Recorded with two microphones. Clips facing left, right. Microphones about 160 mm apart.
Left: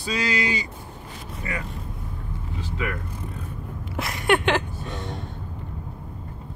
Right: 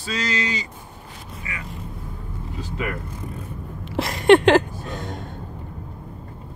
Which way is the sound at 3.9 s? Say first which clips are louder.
Right 8 dB; 30° right (ahead or behind).